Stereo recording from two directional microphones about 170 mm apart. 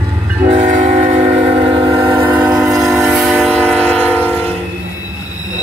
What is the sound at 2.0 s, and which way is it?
Train, 10° right (ahead or behind).